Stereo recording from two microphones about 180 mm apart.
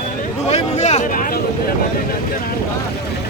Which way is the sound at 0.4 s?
40° left (ahead or behind).